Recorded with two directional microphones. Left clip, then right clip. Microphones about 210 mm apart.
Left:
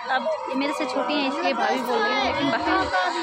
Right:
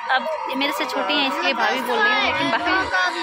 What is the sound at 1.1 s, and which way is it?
Speech, centre (ahead or behind).